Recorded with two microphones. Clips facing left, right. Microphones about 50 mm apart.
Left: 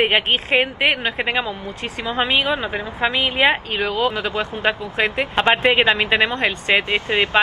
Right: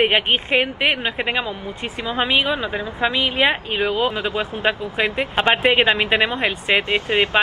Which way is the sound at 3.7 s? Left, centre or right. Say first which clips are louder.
Even; centre.